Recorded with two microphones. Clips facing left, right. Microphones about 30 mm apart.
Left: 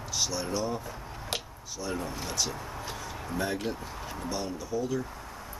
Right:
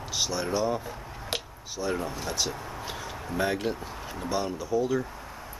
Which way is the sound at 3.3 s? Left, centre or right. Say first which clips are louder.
Right 4 dB; right.